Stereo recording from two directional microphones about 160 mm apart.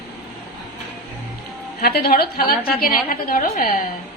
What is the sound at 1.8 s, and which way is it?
A woman's voice, 70° left (ahead or behind).